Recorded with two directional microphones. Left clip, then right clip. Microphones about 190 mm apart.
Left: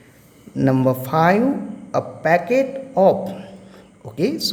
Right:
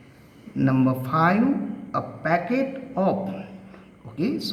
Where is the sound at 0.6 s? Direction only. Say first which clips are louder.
Left 5 dB; 45° left (ahead or behind).